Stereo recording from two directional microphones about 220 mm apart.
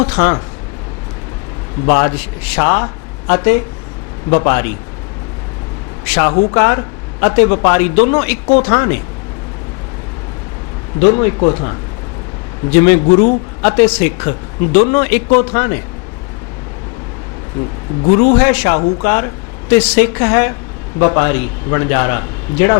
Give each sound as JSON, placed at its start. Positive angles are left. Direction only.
{"t": 0.0, "sound": "a man's voice", "side_deg": 15}
{"t": 1.9, "sound": "a man's voice", "side_deg": 15}
{"t": 6.1, "sound": "a man's voice", "side_deg": 10}
{"t": 11.0, "sound": "a man's voice", "side_deg": 15}
{"t": 18.3, "sound": "a man's voice", "side_deg": 10}